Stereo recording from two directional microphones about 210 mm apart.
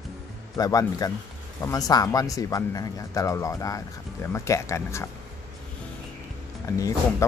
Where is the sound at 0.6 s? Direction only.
15° left (ahead or behind).